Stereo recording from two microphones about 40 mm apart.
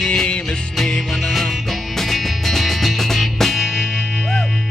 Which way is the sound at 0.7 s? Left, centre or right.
Centre.